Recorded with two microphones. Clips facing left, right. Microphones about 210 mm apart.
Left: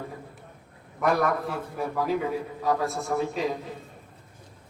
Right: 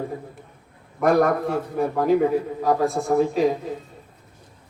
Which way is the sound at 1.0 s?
50° right (ahead or behind).